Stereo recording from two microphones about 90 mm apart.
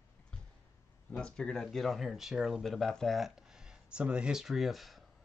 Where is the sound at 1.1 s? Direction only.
10° left (ahead or behind).